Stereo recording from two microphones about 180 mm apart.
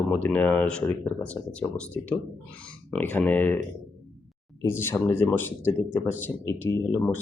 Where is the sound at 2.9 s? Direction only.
10° left (ahead or behind).